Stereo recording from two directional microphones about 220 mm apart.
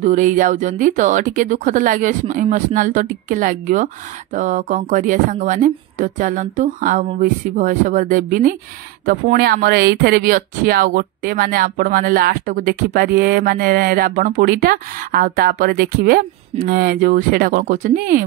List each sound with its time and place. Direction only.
0.0 s speech: 35° right (ahead or behind)